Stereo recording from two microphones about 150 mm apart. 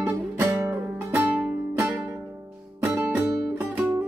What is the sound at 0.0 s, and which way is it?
Music, 10° right (ahead or behind).